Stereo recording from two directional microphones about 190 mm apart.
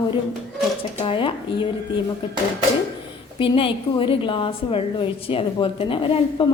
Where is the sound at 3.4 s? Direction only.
25° left (ahead or behind).